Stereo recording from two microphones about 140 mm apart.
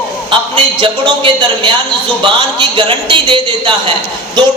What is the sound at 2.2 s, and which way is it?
A man's voice, 35° right (ahead or behind).